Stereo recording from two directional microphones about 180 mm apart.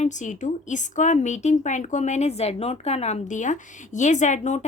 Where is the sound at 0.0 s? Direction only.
45° left (ahead or behind).